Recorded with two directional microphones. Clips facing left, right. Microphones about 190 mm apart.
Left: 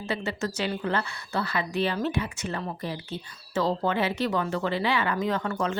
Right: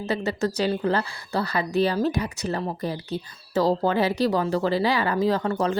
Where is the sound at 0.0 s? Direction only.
40° right (ahead or behind).